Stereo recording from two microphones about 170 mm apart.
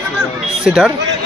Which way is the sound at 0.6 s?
5° right (ahead or behind).